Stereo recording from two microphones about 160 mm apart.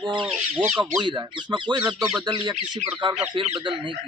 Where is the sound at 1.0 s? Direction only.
30° right (ahead or behind).